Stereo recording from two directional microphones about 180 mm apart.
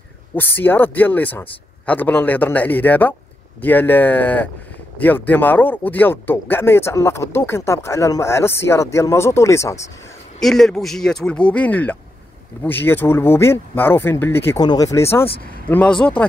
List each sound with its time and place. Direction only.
0.4 s speech: 10° left (ahead or behind)
10.4 s speech: centre (ahead or behind)